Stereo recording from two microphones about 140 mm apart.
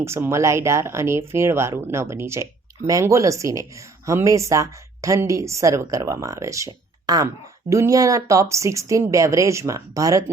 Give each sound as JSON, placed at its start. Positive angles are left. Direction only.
{"t": 0.0, "sound": "speech", "side_deg": -20}